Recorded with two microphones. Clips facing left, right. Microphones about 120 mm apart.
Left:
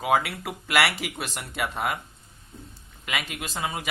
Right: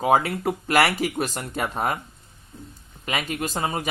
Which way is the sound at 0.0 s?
40° right (ahead or behind).